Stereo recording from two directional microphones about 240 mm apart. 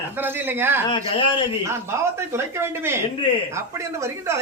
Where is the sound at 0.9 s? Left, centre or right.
Left.